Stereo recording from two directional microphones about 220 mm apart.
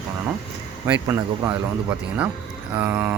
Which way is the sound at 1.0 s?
15° right (ahead or behind).